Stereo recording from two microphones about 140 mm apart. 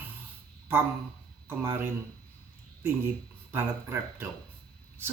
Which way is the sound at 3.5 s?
15° right (ahead or behind).